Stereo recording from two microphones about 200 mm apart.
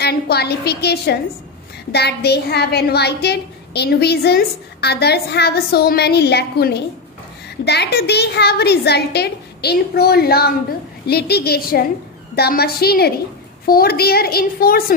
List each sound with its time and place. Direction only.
0.0 s a woman's voice: 55° left (ahead or behind)